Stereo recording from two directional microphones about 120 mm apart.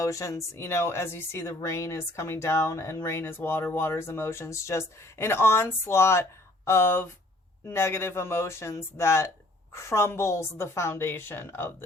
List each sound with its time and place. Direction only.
0.0 s speech: 25° left (ahead or behind)